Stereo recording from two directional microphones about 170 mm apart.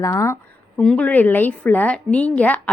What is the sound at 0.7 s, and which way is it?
A woman's voice, 5° left (ahead or behind).